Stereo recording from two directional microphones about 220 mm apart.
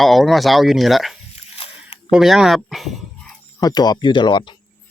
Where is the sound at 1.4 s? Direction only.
25° left (ahead or behind).